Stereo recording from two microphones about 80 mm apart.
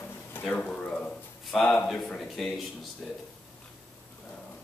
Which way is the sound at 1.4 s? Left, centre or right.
Centre.